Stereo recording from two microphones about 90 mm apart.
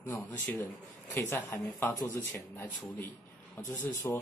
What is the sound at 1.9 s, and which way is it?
Speech, 40° left (ahead or behind).